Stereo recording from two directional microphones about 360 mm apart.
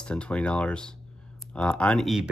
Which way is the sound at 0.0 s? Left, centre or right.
Centre.